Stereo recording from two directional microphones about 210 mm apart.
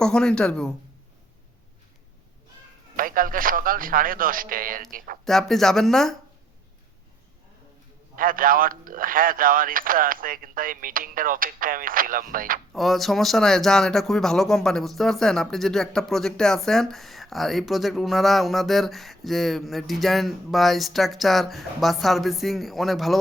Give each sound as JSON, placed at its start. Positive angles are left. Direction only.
{"t": 0.0, "sound": "speech", "side_deg": 5}
{"t": 2.9, "sound": "speech", "side_deg": -40}
{"t": 5.2, "sound": "speech", "side_deg": 0}
{"t": 8.1, "sound": "speech", "side_deg": -40}
{"t": 12.7, "sound": "speech", "side_deg": 0}